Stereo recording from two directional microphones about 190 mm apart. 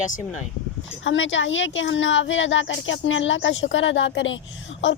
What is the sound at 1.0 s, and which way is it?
A woman's voice, 80° left.